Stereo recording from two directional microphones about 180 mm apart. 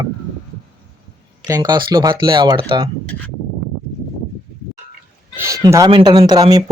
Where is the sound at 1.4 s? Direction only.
20° right (ahead or behind).